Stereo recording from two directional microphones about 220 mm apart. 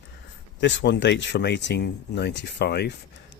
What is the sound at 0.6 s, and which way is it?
Speech, 55° left (ahead or behind).